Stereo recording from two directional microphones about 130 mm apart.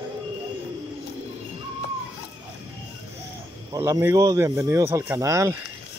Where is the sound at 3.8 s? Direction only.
20° right (ahead or behind).